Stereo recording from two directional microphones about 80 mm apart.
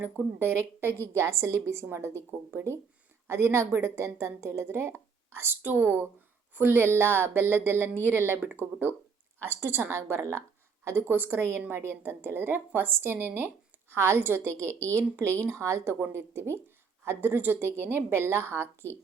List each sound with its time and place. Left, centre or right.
0.0 s a woman's voice: right